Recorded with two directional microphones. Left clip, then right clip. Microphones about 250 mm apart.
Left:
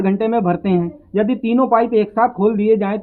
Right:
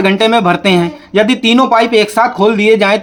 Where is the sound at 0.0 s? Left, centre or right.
Centre.